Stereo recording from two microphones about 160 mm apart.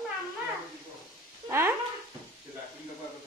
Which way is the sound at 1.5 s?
15° right (ahead or behind).